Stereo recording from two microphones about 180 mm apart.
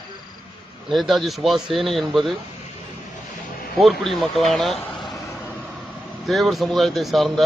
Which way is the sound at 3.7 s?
Centre (ahead or behind).